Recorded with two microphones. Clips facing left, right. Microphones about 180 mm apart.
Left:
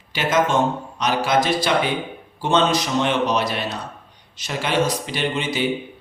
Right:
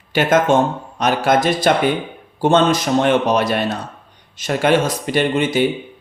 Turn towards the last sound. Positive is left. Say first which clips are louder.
# right 7 dB
turn(degrees=-50)  # may be behind; listen again after turning